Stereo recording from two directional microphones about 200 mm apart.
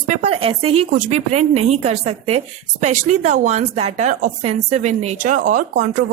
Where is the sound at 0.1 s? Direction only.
30° right (ahead or behind).